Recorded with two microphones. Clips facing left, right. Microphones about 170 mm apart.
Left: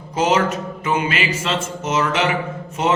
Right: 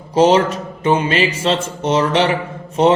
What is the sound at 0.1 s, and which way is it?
A man's voice, 30° right (ahead or behind).